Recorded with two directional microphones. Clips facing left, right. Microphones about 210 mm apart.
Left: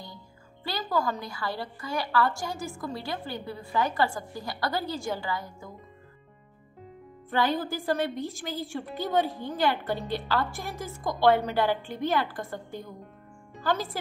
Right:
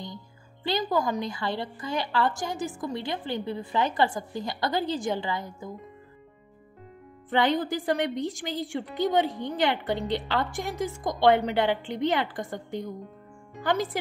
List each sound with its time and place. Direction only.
0.7 s a woman's voice: 20° right (ahead or behind)
7.2 s a woman's voice: 20° right (ahead or behind)